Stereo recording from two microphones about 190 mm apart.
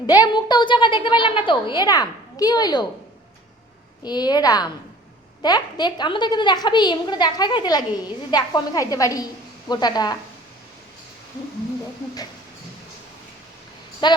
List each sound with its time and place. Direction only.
0.1 s a woman's voice: 20° left (ahead or behind)
4.0 s a woman's voice: 20° left (ahead or behind)
14.0 s a woman's voice: 25° left (ahead or behind)